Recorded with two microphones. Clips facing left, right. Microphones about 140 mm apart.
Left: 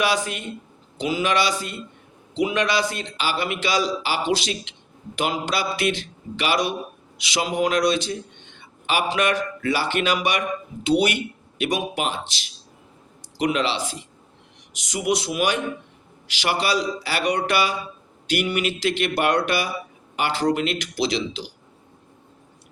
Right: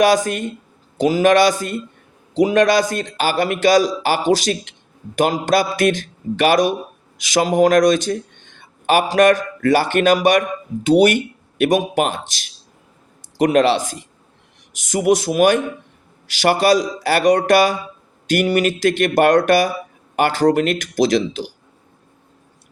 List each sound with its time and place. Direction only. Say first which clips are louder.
0.0 s a man's voice: right 8 dB; 45° right (ahead or behind)